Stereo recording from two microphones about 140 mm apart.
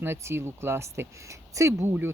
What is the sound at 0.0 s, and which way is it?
Speech, 20° right (ahead or behind).